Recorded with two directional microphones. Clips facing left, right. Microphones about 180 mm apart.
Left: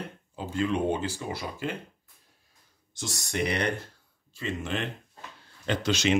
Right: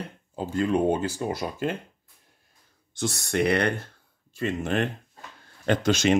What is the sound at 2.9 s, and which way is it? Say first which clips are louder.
Speech: right 7 dB; 60° right (ahead or behind).